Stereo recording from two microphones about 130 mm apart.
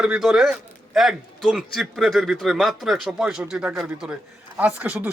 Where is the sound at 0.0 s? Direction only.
5° right (ahead or behind).